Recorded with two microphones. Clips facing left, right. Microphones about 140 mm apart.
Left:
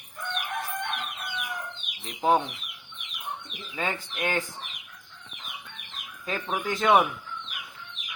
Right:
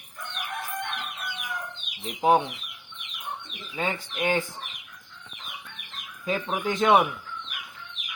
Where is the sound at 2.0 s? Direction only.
10° right (ahead or behind).